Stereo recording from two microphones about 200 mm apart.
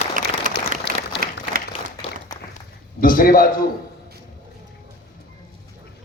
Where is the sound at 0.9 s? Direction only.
60° left (ahead or behind).